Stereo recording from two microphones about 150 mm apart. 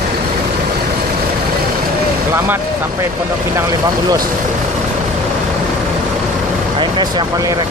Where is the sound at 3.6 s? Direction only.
25° right (ahead or behind).